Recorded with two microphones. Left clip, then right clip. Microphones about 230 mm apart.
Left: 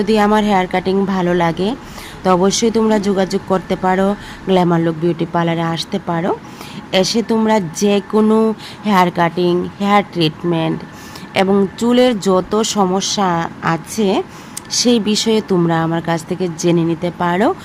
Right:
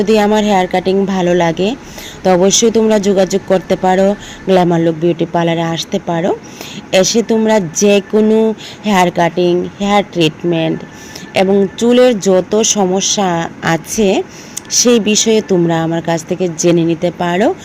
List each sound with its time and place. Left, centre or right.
0.0 s speech: centre
7.0 s speech: left
7.3 s speech: centre
10.2 s speech: left
11.5 s speech: centre